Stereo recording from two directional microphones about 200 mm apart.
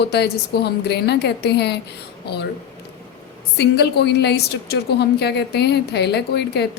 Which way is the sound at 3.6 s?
55° left (ahead or behind).